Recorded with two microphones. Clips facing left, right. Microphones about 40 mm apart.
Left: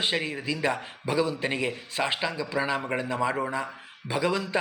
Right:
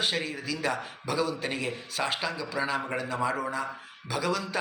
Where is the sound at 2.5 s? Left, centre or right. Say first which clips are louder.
Left 2 dB; left.